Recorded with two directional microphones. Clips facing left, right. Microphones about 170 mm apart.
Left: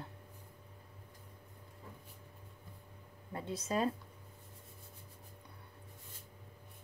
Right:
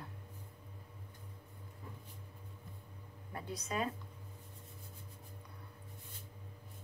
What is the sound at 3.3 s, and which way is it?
Speech, 25° left (ahead or behind).